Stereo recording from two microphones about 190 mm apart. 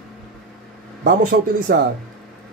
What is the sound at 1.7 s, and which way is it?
Speech, 50° right (ahead or behind).